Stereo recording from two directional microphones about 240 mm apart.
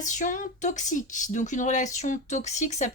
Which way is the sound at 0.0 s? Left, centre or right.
Left.